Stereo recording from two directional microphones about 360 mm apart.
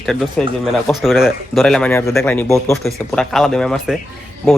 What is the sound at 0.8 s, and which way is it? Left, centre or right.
Speech, centre.